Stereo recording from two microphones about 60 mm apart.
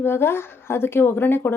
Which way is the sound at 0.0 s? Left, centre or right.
Left.